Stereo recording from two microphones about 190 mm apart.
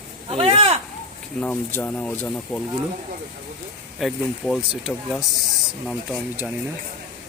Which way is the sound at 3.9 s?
Centre (ahead or behind).